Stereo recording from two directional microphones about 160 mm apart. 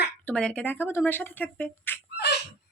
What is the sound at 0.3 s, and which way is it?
Speech, 5° left (ahead or behind).